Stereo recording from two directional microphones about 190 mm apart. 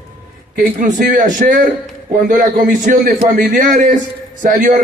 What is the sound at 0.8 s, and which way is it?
A man's voice, 45° right (ahead or behind).